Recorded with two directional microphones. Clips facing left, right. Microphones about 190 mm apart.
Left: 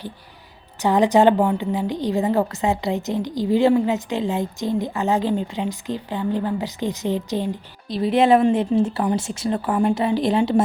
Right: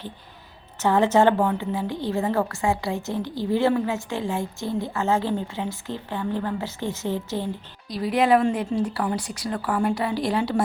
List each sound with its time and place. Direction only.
0.8 s a woman's voice: 15° left (ahead or behind)